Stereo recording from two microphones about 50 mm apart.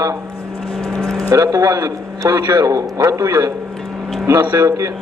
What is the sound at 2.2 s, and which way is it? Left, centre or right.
Speech, right.